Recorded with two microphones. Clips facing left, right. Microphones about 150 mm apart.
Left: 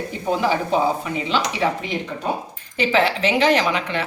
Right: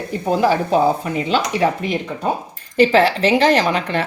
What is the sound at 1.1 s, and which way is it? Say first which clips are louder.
Speech: right 4 dB; 45° right (ahead or behind).